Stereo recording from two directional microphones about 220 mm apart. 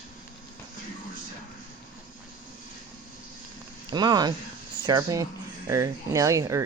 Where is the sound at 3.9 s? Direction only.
20° right (ahead or behind).